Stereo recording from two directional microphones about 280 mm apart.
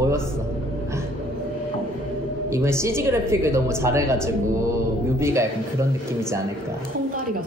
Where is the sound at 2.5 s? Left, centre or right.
Centre.